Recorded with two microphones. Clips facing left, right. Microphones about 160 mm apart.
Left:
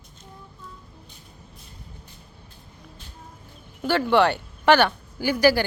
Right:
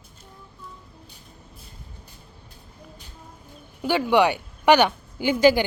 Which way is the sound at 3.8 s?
10° right (ahead or behind).